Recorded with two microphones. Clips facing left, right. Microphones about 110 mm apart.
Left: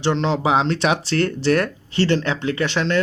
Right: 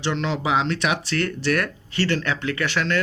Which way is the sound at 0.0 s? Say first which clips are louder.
Left 5 dB; 30° left (ahead or behind).